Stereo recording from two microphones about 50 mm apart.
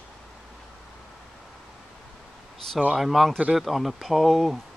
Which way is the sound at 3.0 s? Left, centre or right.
Centre.